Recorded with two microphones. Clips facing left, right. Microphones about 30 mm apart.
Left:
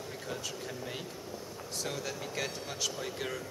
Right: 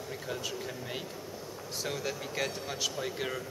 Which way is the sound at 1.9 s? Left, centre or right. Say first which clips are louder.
Right 3 dB; centre.